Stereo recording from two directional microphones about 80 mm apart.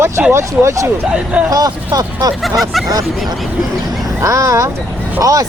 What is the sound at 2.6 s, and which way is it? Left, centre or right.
Speech, centre.